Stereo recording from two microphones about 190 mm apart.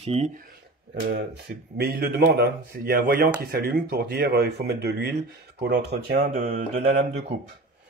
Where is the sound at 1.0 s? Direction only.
55° right (ahead or behind).